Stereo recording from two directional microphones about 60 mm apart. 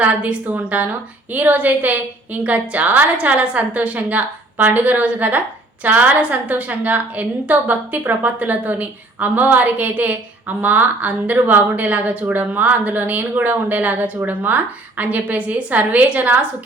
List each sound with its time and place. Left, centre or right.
0.0 s a woman's voice: right